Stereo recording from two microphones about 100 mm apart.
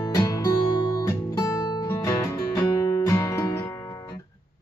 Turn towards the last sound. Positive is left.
turn(degrees=30)  # may be behind; listen again after turning